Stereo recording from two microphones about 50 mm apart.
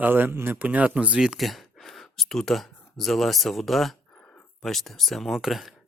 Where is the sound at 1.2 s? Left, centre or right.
Centre.